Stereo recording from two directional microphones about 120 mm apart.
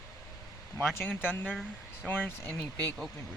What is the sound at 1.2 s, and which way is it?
Speech, 15° left (ahead or behind).